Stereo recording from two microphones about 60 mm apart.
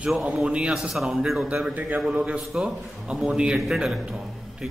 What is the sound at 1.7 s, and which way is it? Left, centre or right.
Speech, right.